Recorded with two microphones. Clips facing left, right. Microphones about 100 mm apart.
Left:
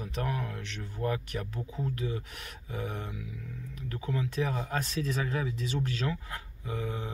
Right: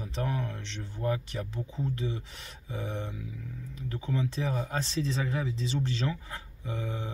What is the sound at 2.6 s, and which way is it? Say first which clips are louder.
Speech: right 1 dB; 20° right (ahead or behind).